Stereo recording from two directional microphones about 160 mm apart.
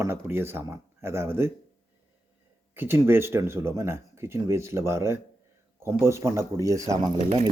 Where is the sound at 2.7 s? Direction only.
15° right (ahead or behind).